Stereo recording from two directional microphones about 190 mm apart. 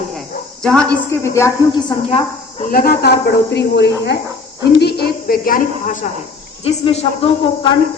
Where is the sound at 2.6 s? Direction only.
50° left (ahead or behind).